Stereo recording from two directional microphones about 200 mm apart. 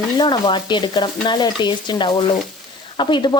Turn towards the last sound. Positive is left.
turn(degrees=25)  # may be behind; listen again after turning